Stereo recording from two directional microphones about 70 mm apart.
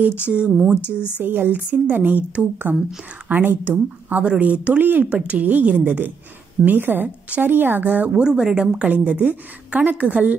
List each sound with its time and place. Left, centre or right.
0.0 s speech: right
1.2 s a woman's voice: right
8.1 s a woman's voice: centre